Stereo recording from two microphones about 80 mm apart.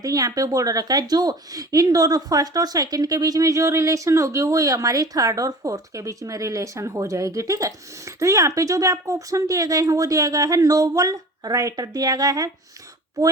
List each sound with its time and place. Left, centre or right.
0.0 s a woman's voice: right